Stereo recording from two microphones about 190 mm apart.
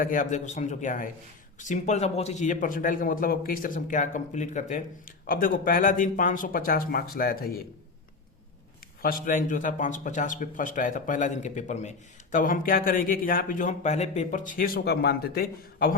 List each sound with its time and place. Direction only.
0.0 s a man's voice: 45° left (ahead or behind)
9.0 s a man's voice: 50° left (ahead or behind)